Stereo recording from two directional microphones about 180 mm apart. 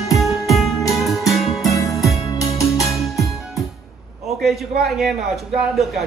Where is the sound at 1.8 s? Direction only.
20° left (ahead or behind).